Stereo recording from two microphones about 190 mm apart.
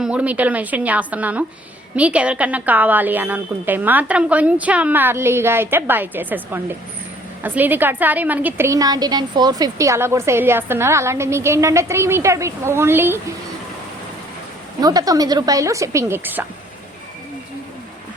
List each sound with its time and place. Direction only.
0.0 s a woman's voice: 5° right (ahead or behind)
14.8 s a woman's voice: 20° right (ahead or behind)